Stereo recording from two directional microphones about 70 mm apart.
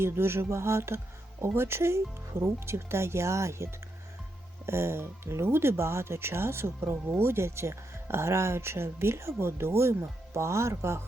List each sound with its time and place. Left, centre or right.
0.0 s speech: right